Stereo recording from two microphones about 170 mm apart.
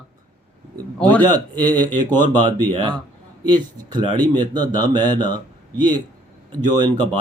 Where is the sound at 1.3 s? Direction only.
25° right (ahead or behind).